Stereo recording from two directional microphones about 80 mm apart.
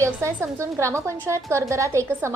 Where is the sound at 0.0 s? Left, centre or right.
Right.